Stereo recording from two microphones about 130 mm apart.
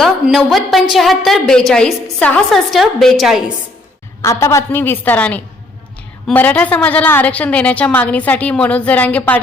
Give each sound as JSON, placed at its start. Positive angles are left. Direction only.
{"t": 0.0, "sound": "a woman's voice", "side_deg": 0}
{"t": 4.2, "sound": "a woman's voice", "side_deg": 20}